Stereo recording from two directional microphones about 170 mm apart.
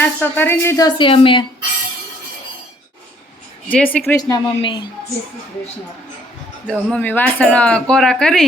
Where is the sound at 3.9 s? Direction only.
15° left (ahead or behind).